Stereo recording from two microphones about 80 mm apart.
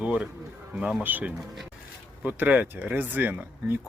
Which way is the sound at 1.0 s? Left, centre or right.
Right.